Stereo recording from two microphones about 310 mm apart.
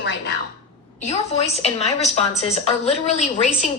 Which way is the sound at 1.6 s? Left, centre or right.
Left.